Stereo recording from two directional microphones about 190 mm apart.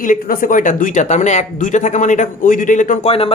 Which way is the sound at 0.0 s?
45° left (ahead or behind).